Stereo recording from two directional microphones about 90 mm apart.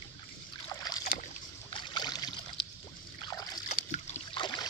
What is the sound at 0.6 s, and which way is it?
Rowboat, 40° left (ahead or behind).